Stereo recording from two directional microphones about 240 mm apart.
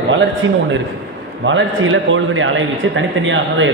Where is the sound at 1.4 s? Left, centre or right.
Right.